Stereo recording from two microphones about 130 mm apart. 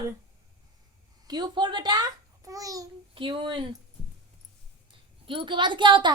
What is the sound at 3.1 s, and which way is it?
Speech, 40° right (ahead or behind).